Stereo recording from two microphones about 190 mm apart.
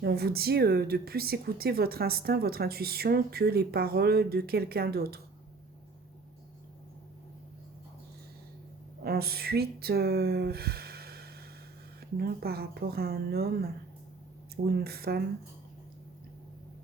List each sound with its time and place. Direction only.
0.0 s speech: 55° right (ahead or behind)
9.0 s speech: 55° right (ahead or behind)